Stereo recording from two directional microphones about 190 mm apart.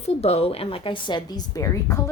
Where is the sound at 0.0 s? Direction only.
35° left (ahead or behind).